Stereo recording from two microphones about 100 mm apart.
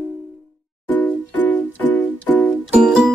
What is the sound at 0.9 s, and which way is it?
Music, 15° left (ahead or behind).